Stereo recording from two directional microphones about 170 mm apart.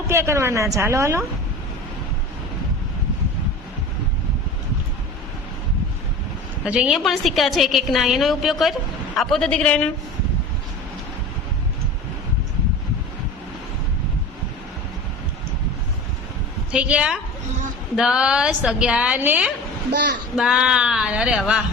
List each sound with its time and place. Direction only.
0.1 s a woman's voice: 15° right (ahead or behind)
6.7 s a woman's voice: 5° right (ahead or behind)
16.7 s a woman's voice: 5° right (ahead or behind)
19.9 s a child's voice: 85° right
20.3 s a woman's voice: 5° right (ahead or behind)